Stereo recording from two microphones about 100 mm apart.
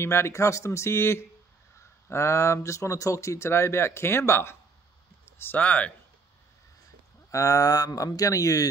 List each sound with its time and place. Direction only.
0.0 s speech: 25° left (ahead or behind)
7.2 s speech: 30° left (ahead or behind)